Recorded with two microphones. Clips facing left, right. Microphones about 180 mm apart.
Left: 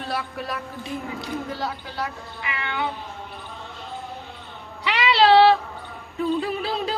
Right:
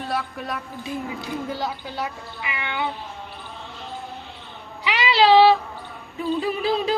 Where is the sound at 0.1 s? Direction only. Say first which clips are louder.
Even; centre (ahead or behind).